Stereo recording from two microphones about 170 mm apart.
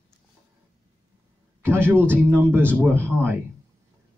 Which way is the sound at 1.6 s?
15° right (ahead or behind).